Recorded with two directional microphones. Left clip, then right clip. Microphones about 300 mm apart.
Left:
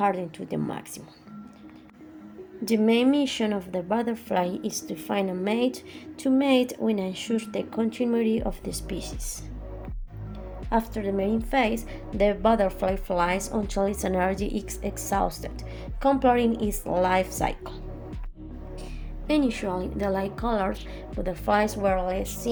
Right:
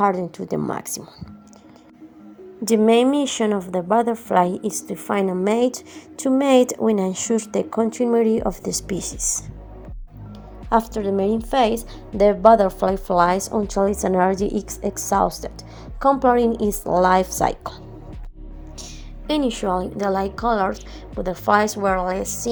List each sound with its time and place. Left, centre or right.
0.0 s a woman's voice: right
2.6 s a woman's voice: centre
10.7 s a woman's voice: right
19.3 s a woman's voice: centre